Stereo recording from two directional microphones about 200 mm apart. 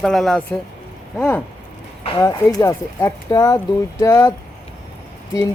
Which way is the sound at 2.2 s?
20° left (ahead or behind).